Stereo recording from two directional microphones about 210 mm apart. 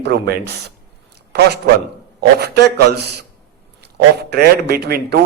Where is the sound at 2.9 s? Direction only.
50° right (ahead or behind).